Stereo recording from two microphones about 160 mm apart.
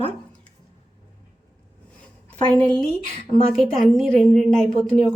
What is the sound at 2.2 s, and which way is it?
A woman's voice, 5° left (ahead or behind).